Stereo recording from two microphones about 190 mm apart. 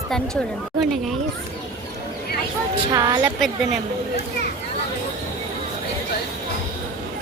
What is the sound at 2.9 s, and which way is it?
Speech, 20° right (ahead or behind).